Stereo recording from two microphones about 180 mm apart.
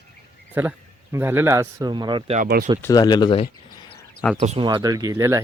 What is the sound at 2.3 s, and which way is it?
Speech, 50° right (ahead or behind).